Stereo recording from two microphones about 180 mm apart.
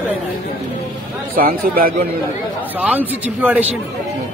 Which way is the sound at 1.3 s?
55° right (ahead or behind).